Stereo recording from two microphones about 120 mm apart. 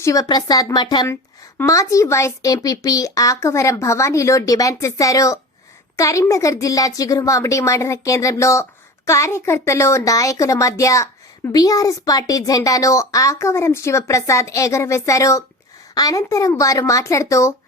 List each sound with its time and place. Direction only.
0.0 s a woman's voice: 30° left (ahead or behind)
1.0 s a woman's voice: 25° left (ahead or behind)